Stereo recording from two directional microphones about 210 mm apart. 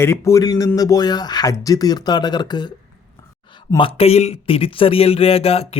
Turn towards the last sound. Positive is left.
turn(degrees=30)  # may be behind; listen again after turning